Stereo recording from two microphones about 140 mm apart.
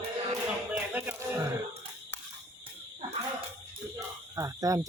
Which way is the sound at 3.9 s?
25° right (ahead or behind).